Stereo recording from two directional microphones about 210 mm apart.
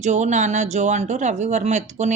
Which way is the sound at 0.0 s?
35° right (ahead or behind).